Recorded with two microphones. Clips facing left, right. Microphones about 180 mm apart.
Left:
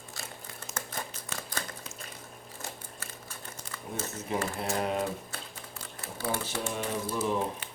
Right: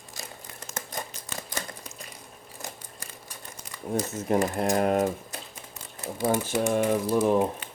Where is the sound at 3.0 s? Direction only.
15° right (ahead or behind).